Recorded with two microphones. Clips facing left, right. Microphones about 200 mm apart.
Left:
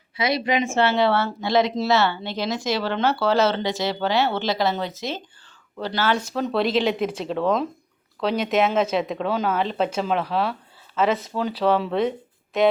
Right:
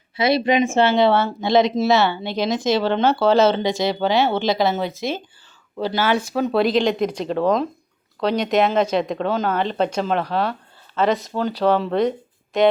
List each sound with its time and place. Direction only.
0.2 s speech: 30° right (ahead or behind); by 12.7 s centre (ahead or behind)